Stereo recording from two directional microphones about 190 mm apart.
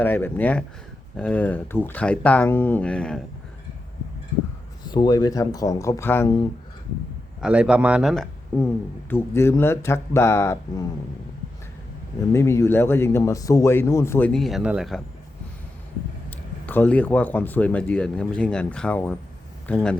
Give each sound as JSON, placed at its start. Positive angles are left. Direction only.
{"t": 0.0, "sound": "speech", "side_deg": 10}
{"t": 4.8, "sound": "speech", "side_deg": 20}
{"t": 7.4, "sound": "speech", "side_deg": -5}
{"t": 12.3, "sound": "speech", "side_deg": 15}
{"t": 16.3, "sound": "speech", "side_deg": 10}